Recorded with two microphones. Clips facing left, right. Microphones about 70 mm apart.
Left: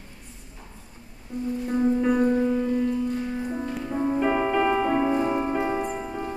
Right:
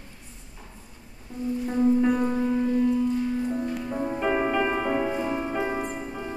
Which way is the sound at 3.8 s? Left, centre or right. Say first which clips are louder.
Left 3 dB; centre.